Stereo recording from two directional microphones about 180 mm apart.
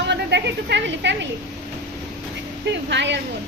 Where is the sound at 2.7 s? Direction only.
80° right.